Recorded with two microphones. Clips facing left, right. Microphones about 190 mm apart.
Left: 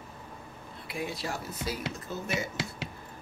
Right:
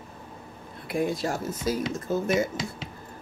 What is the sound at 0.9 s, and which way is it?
Speech, 50° right (ahead or behind).